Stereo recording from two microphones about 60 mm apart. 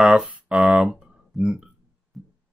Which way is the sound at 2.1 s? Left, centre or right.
Centre.